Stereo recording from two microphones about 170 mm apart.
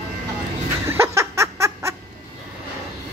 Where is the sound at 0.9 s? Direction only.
15° right (ahead or behind).